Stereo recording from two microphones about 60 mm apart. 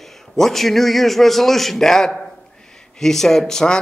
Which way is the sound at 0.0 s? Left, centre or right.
Centre.